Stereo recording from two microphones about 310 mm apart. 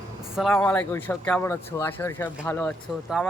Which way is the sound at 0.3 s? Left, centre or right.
Centre.